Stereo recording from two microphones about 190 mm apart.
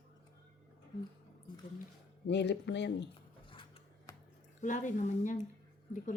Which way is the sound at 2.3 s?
65° left (ahead or behind).